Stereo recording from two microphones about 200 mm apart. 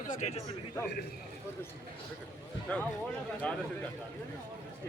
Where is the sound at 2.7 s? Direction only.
5° left (ahead or behind).